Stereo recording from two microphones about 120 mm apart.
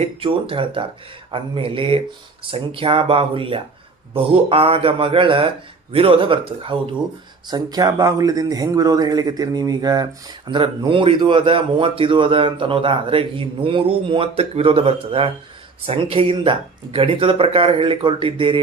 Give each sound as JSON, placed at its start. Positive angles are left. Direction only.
{"t": 0.0, "sound": "a man's voice", "side_deg": -50}
{"t": 7.4, "sound": "a man's voice", "side_deg": -35}